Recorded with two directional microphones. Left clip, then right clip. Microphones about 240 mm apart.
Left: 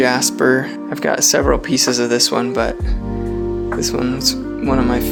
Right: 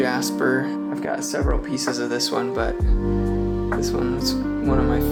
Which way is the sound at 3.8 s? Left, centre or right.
Left.